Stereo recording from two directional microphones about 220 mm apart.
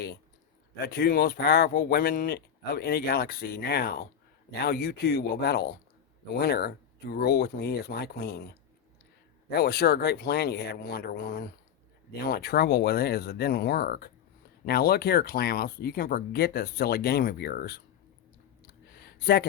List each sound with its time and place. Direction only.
0.8 s speech: 40° left (ahead or behind)
9.5 s speech: 45° left (ahead or behind)
18.9 s a sound: 45° left (ahead or behind)